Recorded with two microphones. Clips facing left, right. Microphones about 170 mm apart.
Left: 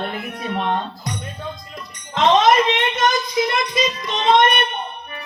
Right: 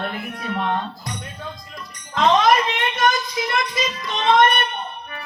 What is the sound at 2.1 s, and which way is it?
Music, 25° left (ahead or behind).